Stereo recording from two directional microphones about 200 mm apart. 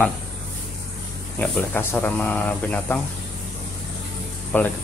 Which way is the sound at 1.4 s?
5° left (ahead or behind).